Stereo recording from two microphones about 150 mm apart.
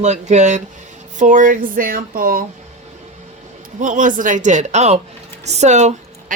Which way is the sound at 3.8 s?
60° right (ahead or behind).